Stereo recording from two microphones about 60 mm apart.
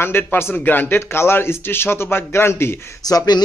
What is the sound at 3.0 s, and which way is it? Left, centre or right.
Speech, left.